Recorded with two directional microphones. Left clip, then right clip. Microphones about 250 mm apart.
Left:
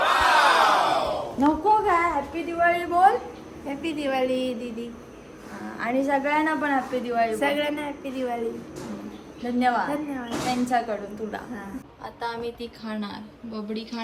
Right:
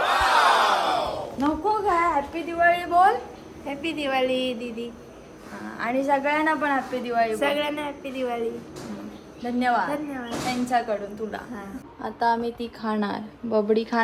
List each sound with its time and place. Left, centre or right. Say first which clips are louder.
0.0 s battle cry: left 1 dB; centre
2.3 s a woman's voice: right 1 dB; centre
9.4 s a woman's voice: even; centre
12.2 s a woman's voice: right 8 dB; right
12.5 s a woman's voice: right 5 dB; centre